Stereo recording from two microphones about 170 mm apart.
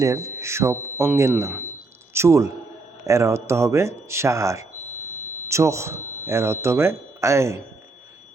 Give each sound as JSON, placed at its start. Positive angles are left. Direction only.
{"t": 0.0, "sound": "speech", "side_deg": -20}